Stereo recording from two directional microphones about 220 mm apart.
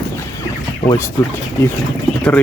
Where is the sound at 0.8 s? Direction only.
10° left (ahead or behind).